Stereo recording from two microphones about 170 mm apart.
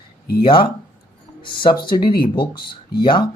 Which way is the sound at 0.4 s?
30° left (ahead or behind).